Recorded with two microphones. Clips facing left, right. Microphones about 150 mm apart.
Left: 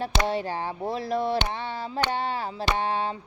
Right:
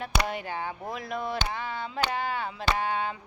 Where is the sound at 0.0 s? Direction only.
30° left (ahead or behind).